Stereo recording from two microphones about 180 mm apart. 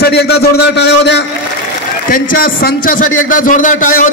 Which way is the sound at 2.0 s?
50° left (ahead or behind).